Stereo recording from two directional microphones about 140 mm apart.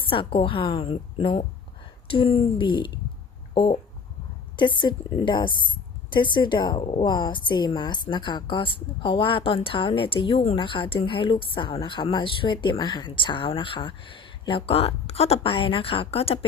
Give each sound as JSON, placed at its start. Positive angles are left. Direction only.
{"t": 0.0, "sound": "a woman's voice", "side_deg": 40}
{"t": 3.5, "sound": "a sound", "side_deg": 35}
{"t": 4.5, "sound": "a woman's voice", "side_deg": 35}